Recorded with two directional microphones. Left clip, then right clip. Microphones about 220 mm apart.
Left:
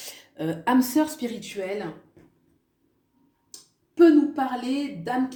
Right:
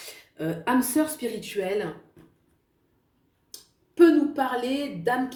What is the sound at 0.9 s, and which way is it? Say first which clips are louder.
Speech: left 1 dB; 30° left (ahead or behind).